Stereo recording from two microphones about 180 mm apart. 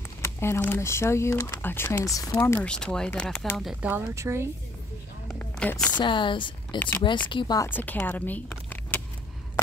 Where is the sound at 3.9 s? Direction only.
15° right (ahead or behind).